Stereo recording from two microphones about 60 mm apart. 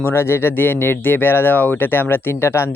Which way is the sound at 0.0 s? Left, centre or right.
Left.